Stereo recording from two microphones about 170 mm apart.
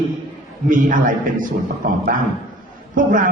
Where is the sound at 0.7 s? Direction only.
50° right (ahead or behind).